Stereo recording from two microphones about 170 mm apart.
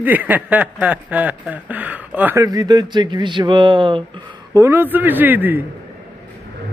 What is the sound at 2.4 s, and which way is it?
Speech, 20° right (ahead or behind).